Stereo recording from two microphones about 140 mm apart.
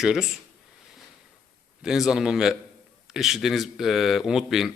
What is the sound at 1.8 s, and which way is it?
A man's voice, 5° right (ahead or behind).